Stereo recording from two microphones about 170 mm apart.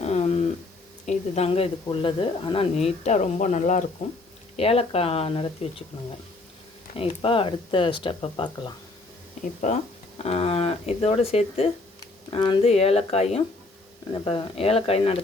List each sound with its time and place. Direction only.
0.0 s a sound: 40° left (ahead or behind)
1.0 s speech: 35° left (ahead or behind)
4.5 s speech: 35° left (ahead or behind)
6.9 s speech: 35° left (ahead or behind)
9.4 s speech: 45° left (ahead or behind)